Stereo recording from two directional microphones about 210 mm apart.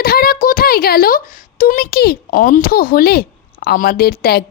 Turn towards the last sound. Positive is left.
turn(degrees=45)  # may be behind; listen again after turning